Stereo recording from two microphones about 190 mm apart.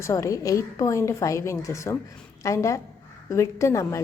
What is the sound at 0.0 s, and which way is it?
A woman's voice, 15° left (ahead or behind).